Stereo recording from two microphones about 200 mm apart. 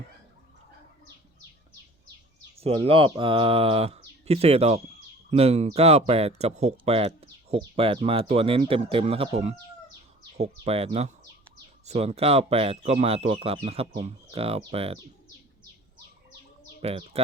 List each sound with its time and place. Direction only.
2.6 s speech: 30° right (ahead or behind)
16.8 s speech: 30° right (ahead or behind)